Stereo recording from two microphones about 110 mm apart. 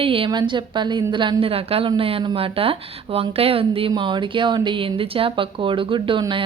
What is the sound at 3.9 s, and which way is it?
Speech, 45° right (ahead or behind).